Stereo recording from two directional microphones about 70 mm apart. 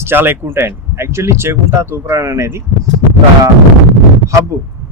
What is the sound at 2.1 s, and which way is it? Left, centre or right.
Speech, right.